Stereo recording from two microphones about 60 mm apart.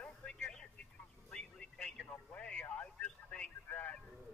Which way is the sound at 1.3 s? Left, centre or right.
Centre.